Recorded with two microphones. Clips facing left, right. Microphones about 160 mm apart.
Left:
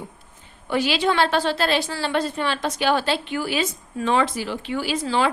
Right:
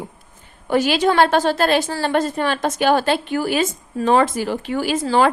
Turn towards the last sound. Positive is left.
turn(degrees=-45)  # may be behind; listen again after turning